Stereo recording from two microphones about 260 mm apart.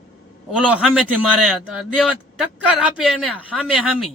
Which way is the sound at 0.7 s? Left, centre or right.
Centre.